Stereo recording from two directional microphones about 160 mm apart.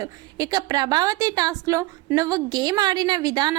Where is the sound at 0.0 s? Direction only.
25° right (ahead or behind).